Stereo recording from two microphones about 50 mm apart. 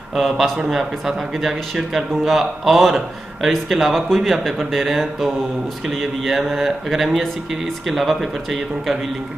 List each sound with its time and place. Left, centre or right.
0.1 s speech: centre